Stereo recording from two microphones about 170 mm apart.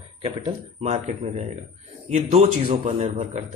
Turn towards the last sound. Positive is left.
turn(degrees=-45)  # may be behind; listen again after turning